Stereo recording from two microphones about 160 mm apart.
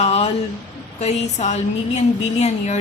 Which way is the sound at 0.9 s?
45° left (ahead or behind).